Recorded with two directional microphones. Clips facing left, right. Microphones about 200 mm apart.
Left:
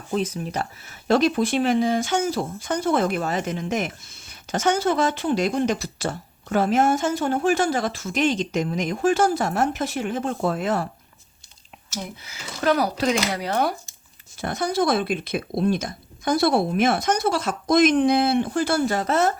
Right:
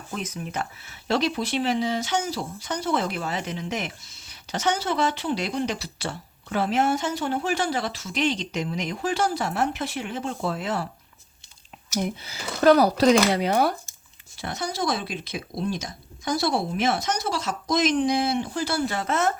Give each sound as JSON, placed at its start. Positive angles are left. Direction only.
{"t": 0.1, "sound": "speech", "side_deg": 30}
{"t": 12.2, "sound": "speech", "side_deg": -35}
{"t": 13.5, "sound": "speech", "side_deg": -5}
{"t": 14.3, "sound": "speech", "side_deg": 50}